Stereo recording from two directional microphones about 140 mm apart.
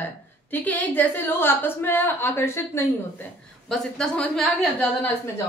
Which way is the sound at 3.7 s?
5° left (ahead or behind).